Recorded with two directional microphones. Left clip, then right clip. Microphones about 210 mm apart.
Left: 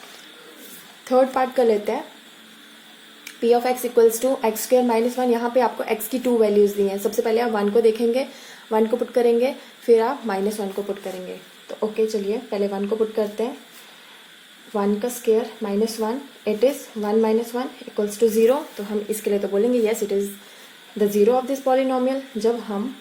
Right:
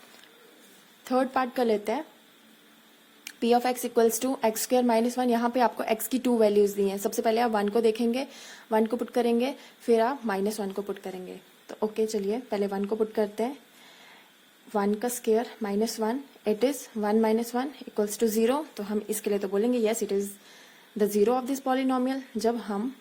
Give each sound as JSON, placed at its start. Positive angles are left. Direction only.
{"t": 1.0, "sound": "speech", "side_deg": -40}
{"t": 3.4, "sound": "speech", "side_deg": -45}
{"t": 11.8, "sound": "speech", "side_deg": -50}
{"t": 14.7, "sound": "speech", "side_deg": -50}
{"t": 21.2, "sound": "speech", "side_deg": -50}